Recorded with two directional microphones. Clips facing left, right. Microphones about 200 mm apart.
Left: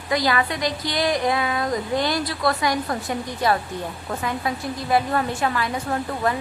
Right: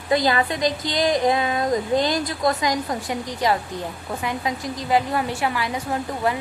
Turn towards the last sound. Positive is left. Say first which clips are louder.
# even
turn(degrees=-15)  # may be behind; listen again after turning